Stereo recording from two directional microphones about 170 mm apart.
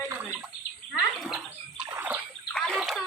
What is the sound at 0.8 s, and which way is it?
Bird, 30° right (ahead or behind).